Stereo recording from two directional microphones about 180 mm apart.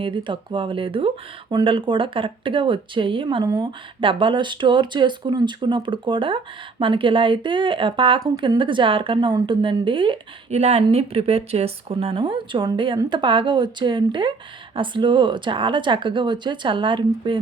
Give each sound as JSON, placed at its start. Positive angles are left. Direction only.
{"t": 0.0, "sound": "speech", "side_deg": -25}